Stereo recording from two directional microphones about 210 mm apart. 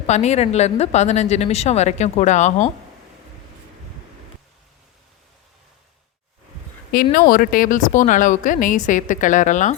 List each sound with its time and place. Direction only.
0.1 s speech: 30° left (ahead or behind)
6.9 s speech: 45° left (ahead or behind)